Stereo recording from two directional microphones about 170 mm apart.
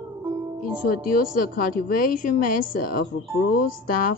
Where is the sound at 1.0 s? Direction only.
55° left (ahead or behind).